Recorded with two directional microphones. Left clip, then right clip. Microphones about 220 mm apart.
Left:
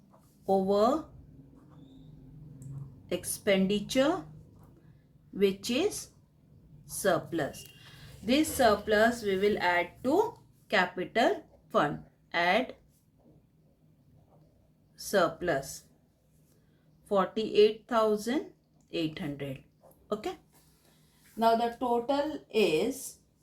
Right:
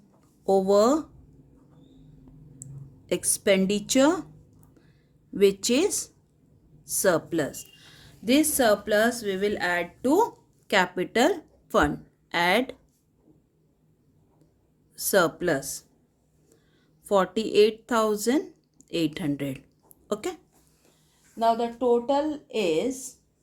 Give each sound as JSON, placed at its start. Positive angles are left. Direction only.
{"t": 0.4, "sound": "speech", "side_deg": -60}
{"t": 3.1, "sound": "speech", "side_deg": -60}
{"t": 5.3, "sound": "a woman's voice", "side_deg": -55}
{"t": 14.9, "sound": "speech", "side_deg": -55}
{"t": 17.1, "sound": "speech", "side_deg": -55}
{"t": 21.3, "sound": "speech", "side_deg": -55}